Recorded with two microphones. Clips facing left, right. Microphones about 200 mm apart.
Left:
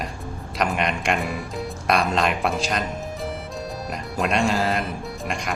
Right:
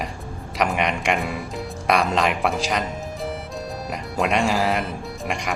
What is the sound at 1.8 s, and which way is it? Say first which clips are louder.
Speech: right 1 dB; 15° right (ahead or behind).